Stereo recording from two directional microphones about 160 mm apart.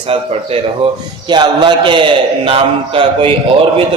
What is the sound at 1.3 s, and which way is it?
A man's voice, 30° right (ahead or behind).